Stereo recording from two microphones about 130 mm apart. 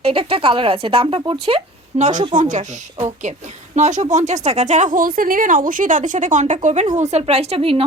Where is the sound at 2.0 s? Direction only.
70° right (ahead or behind).